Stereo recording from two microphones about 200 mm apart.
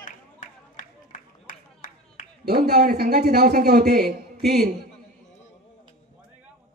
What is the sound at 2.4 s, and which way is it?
A man's voice, 55° right (ahead or behind).